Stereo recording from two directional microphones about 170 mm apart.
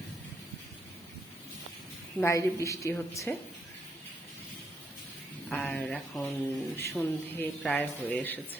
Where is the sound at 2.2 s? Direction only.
20° left (ahead or behind).